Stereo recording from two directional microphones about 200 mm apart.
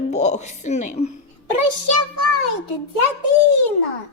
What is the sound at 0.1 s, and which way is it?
A woman's voice, 35° left (ahead or behind).